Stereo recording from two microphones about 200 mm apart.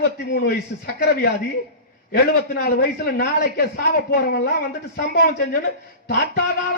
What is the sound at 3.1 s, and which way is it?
A man's voice, 50° left (ahead or behind).